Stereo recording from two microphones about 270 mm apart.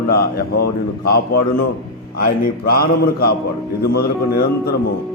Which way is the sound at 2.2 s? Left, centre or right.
Left.